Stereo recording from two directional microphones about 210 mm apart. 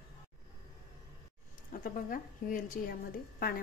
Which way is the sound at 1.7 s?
45° left (ahead or behind).